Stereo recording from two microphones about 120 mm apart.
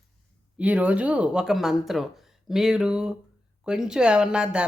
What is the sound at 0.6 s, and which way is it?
A man's voice, 10° right (ahead or behind).